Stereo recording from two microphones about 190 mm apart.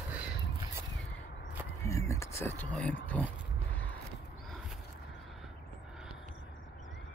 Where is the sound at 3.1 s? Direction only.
5° left (ahead or behind).